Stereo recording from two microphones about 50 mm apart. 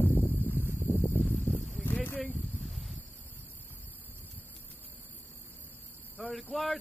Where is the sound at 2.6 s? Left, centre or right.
Centre.